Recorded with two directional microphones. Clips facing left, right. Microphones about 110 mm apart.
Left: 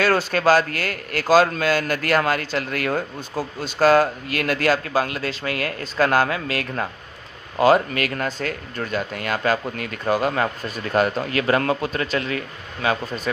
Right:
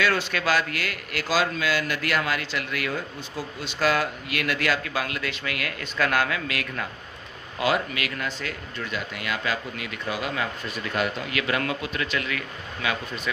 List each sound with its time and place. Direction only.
0.0 s a man's voice: 40° left (ahead or behind)